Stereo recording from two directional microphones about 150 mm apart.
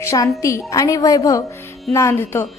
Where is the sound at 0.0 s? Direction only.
20° left (ahead or behind).